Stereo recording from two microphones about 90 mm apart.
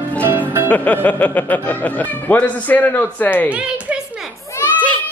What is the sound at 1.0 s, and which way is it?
A man's voice, 15° left (ahead or behind).